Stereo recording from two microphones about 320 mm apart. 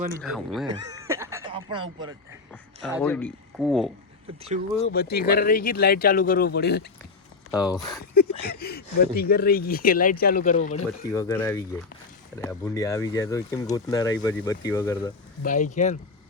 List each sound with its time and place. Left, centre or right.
0.1 s speech: centre
0.9 s a sound: centre
2.5 s speech: centre
4.8 s speech: left
7.5 s speech: centre
8.1 s speech: left
11.1 s speech: centre
15.4 s speech: left